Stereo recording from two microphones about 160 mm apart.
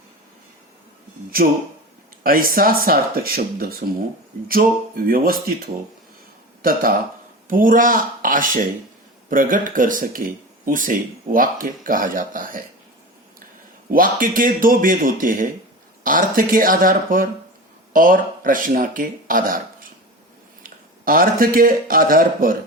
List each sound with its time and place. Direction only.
2.2 s speech: 65° right (ahead or behind)
6.6 s speech: 65° right (ahead or behind)
13.9 s speech: 60° right (ahead or behind)